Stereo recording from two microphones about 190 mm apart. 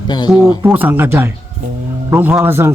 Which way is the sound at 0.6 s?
10° right (ahead or behind).